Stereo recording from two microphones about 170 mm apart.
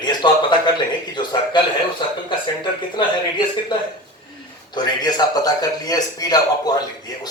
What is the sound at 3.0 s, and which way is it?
Speech, 25° left (ahead or behind).